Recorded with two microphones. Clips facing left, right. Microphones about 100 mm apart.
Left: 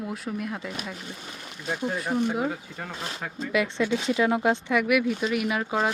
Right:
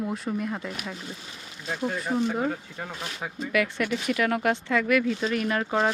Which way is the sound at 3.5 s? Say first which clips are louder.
Left 1 dB; 20° left (ahead or behind).